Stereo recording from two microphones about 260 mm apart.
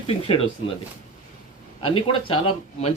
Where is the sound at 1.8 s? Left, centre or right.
Centre.